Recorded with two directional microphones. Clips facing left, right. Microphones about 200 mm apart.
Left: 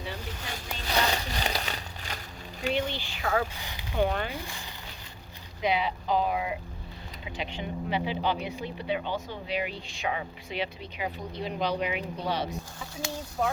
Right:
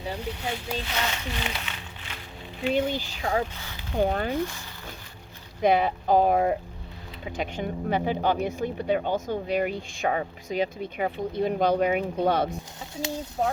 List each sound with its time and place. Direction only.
0.5 s a sound: 40° left (ahead or behind)
2.7 s speech: 40° right (ahead or behind)
3.6 s speech: 15° left (ahead or behind)
3.9 s speech: 40° right (ahead or behind)
5.6 s speech: 50° right (ahead or behind)
13.4 s speech: 25° right (ahead or behind)